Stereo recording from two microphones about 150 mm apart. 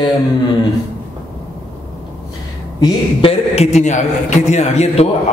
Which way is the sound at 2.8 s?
35° left (ahead or behind).